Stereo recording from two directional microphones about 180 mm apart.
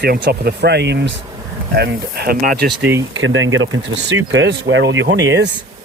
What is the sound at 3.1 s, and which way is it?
Speech, 90° right.